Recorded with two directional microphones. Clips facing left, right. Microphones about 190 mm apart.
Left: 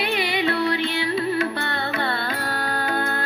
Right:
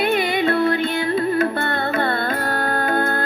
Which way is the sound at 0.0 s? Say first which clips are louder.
Right 4 dB; 50° right (ahead or behind).